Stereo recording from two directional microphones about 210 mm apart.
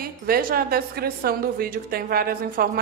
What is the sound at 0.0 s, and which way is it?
A woman's voice, 45° right (ahead or behind).